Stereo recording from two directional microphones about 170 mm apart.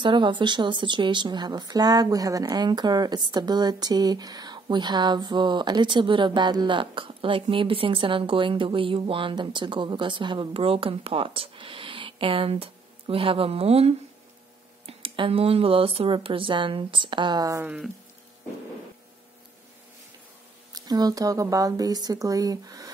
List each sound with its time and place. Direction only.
0.0 s speech: 30° right (ahead or behind)
17.6 s speech: 5° right (ahead or behind)
20.7 s speech: 25° right (ahead or behind)